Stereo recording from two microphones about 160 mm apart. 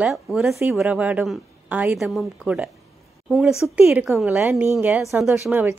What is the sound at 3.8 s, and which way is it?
A woman's voice, 10° right (ahead or behind).